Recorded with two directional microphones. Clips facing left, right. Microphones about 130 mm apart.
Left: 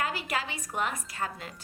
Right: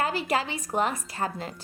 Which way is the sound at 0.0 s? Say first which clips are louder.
Right 5 dB; 30° right (ahead or behind).